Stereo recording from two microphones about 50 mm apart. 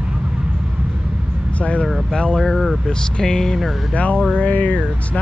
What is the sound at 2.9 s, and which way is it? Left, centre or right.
Speech, centre.